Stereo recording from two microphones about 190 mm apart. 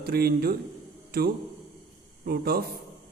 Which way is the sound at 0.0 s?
55° right (ahead or behind).